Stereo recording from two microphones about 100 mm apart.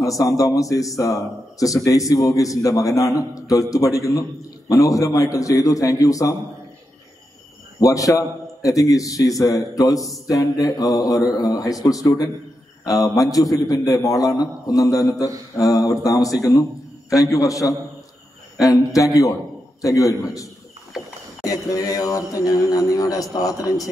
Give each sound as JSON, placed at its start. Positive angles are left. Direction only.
{"t": 0.0, "sound": "a man's voice", "side_deg": 35}
{"t": 7.8, "sound": "a man's voice", "side_deg": 35}
{"t": 20.9, "sound": "a sound", "side_deg": -5}
{"t": 21.5, "sound": "a man's voice", "side_deg": 35}